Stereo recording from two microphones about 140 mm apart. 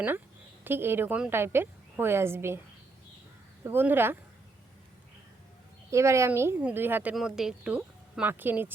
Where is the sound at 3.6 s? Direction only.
15° right (ahead or behind).